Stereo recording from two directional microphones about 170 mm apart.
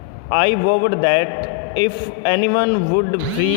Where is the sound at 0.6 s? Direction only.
80° left.